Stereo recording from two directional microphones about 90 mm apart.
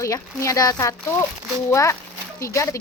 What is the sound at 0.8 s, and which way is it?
Speech, 30° left (ahead or behind).